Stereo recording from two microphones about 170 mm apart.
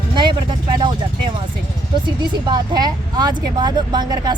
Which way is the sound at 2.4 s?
25° right (ahead or behind).